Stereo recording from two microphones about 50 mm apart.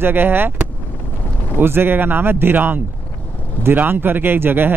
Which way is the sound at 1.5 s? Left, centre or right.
Right.